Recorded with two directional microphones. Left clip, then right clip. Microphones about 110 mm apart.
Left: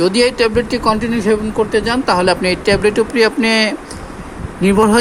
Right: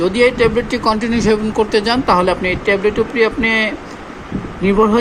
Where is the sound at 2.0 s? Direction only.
25° left (ahead or behind).